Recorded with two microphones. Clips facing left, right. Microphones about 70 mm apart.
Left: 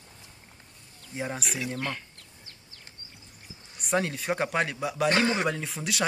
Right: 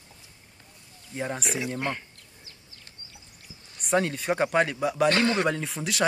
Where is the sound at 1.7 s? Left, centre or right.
Right.